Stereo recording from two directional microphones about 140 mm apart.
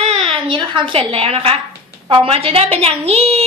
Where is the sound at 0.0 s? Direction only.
40° right (ahead or behind).